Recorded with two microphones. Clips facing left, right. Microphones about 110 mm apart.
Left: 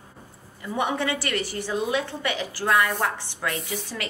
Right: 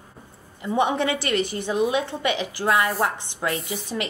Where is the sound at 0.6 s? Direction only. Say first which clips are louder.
Right 4 dB; 20° right (ahead or behind).